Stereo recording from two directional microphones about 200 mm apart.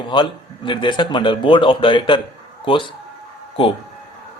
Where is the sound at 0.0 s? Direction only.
25° left (ahead or behind).